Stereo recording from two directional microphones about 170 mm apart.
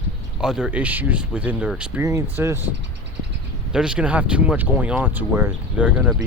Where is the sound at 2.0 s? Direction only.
15° right (ahead or behind).